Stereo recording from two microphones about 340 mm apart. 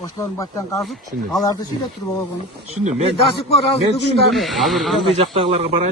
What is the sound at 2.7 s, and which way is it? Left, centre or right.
Speech, centre.